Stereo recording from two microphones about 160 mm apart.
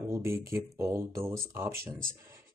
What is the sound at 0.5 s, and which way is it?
Speech, 20° right (ahead or behind).